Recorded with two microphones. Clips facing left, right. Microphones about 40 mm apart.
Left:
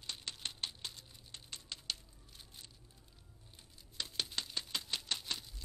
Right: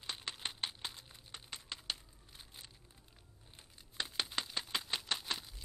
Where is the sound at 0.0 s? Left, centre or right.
Centre.